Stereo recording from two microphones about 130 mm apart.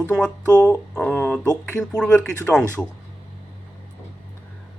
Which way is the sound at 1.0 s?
15° left (ahead or behind).